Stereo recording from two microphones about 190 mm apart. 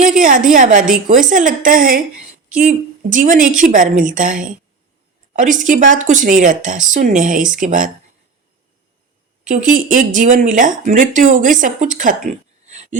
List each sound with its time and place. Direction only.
0.2 s a woman's voice: 45° right (ahead or behind)
3.1 s speech: 45° right (ahead or behind)
9.5 s speech: 45° right (ahead or behind)